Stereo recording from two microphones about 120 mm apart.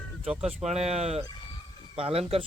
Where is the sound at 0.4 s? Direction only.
65° right (ahead or behind).